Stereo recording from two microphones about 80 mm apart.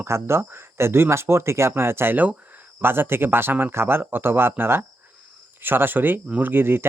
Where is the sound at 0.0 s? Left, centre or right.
Right.